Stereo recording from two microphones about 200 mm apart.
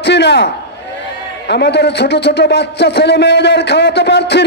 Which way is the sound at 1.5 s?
55° left (ahead or behind).